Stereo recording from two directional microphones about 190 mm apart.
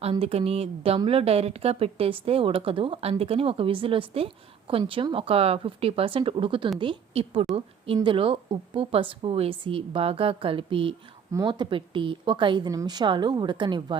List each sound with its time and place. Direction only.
0.0 s speech: 30° right (ahead or behind)